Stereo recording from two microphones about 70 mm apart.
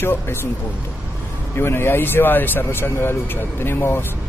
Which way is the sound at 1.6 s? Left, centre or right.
Left.